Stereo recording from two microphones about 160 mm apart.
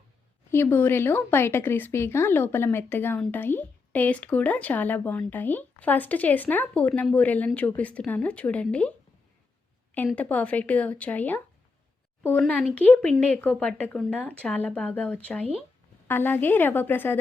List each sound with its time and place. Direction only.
0.5 s speech: 15° left (ahead or behind)
10.1 s speech: 10° left (ahead or behind)